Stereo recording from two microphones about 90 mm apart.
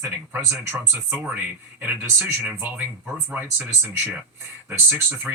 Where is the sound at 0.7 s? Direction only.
20° right (ahead or behind).